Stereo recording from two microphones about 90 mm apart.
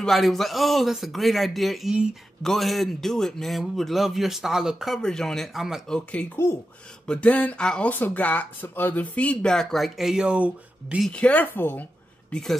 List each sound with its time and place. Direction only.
0.0 s a man's voice: centre (ahead or behind)
6.2 s speech: 15° left (ahead or behind); by 11.0 s 15° right (ahead or behind)
11.1 s speech: 15° left (ahead or behind)
12.3 s speech: 10° left (ahead or behind)